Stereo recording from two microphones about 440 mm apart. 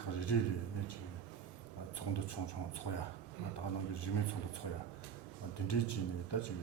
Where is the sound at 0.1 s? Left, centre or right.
Left.